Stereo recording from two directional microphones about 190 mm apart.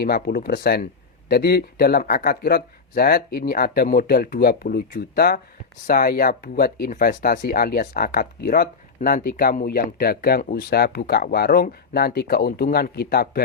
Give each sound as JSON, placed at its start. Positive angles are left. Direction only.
{"t": 0.0, "sound": "speech", "side_deg": 55}